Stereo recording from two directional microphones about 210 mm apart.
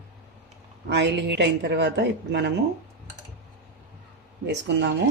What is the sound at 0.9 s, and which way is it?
A woman's voice, 55° right (ahead or behind).